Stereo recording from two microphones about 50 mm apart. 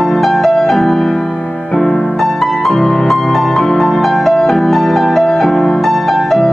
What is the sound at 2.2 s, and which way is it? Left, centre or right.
Music, centre.